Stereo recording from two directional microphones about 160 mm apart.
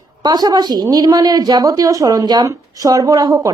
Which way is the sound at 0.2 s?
25° right (ahead or behind).